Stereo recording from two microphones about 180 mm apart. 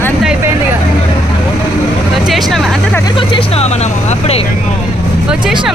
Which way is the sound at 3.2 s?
30° left (ahead or behind).